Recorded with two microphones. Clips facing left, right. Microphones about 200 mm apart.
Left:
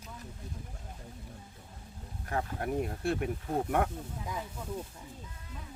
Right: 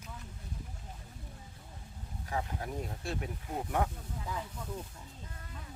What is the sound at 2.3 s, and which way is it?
Speech, 60° left (ahead or behind).